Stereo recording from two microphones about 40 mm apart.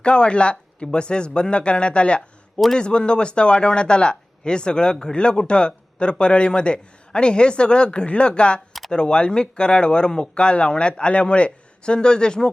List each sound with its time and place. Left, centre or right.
0.0 s speech: left